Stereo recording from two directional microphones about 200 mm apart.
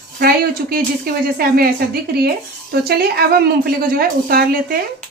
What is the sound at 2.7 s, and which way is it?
A woman's voice, 50° right (ahead or behind).